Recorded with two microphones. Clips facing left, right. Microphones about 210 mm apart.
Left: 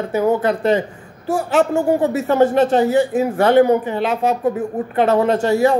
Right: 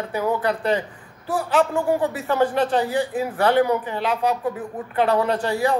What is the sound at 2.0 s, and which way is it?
Speech, 25° left (ahead or behind).